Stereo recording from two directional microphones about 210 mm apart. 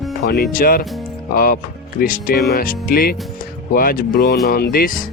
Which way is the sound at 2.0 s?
45° left (ahead or behind).